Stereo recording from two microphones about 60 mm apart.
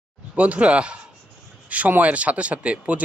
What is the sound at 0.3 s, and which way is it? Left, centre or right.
Speech, right.